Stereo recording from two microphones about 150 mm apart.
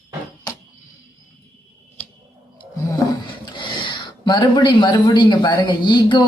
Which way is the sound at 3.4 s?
35° left (ahead or behind).